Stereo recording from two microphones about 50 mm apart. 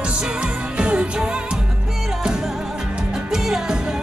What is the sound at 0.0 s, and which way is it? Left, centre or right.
Music, centre.